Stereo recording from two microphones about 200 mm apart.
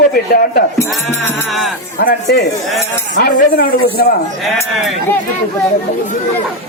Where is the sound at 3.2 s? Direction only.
50° left (ahead or behind).